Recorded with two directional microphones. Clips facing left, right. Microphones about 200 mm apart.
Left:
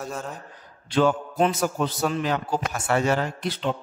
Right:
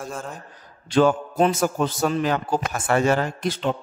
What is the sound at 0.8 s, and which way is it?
A man's voice, 45° right (ahead or behind).